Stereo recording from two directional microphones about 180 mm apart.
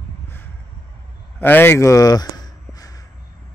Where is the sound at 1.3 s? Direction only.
10° left (ahead or behind).